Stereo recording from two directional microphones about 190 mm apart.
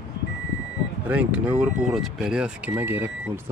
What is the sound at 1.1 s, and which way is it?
Speech, 5° right (ahead or behind).